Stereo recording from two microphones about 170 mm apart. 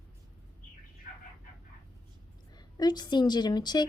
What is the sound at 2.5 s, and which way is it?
A woman's voice, 25° left (ahead or behind).